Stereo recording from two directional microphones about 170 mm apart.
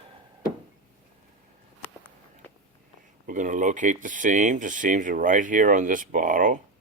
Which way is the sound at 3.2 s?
45° right (ahead or behind).